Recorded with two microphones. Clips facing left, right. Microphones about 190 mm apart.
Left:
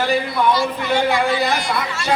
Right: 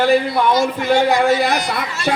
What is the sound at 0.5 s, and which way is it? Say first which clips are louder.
Speech: right 4 dB; 45° right (ahead or behind).